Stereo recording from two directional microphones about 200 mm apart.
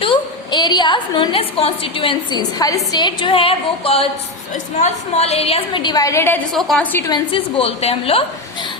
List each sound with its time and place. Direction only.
0.0 s a woman's voice: 25° left (ahead or behind); by 7.1 s 10° left (ahead or behind)
7.1 s a woman's voice: 25° left (ahead or behind)